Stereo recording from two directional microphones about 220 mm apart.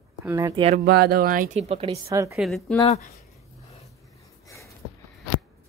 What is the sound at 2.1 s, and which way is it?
Speech, 15° right (ahead or behind).